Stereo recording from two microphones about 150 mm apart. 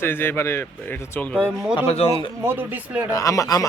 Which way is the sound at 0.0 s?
15° left (ahead or behind).